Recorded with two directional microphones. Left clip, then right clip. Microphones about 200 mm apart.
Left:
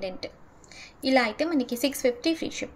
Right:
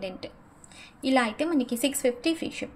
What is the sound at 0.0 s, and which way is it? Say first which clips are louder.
A woman's voice: left 2 dB; centre (ahead or behind).